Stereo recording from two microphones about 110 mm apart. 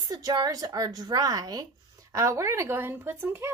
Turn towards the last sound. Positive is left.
turn(degrees=-20)  # may be behind; listen again after turning